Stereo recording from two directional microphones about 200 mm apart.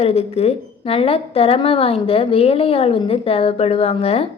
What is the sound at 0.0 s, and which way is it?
A woman's voice, 30° left (ahead or behind).